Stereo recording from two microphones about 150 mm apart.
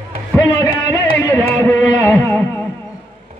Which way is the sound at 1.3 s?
15° left (ahead or behind).